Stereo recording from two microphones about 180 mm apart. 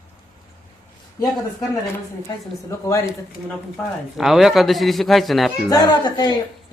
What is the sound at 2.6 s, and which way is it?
Speech, 15° left (ahead or behind).